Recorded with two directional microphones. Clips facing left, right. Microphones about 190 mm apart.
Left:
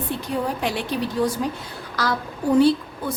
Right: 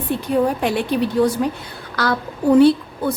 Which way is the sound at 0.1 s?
60° right (ahead or behind).